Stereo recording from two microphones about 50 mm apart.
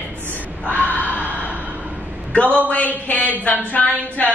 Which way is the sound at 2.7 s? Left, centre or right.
Left.